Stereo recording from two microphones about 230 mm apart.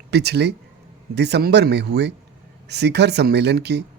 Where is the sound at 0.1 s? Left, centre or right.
Right.